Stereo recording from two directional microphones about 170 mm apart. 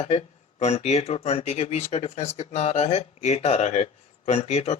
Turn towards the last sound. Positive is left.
turn(degrees=40)  # may be behind; listen again after turning